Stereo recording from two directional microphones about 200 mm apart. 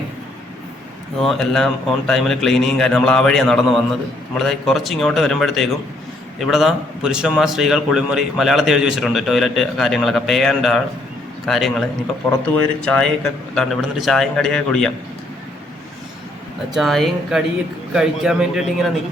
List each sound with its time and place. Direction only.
1.2 s a man's voice: centre (ahead or behind)
16.7 s a man's voice: centre (ahead or behind)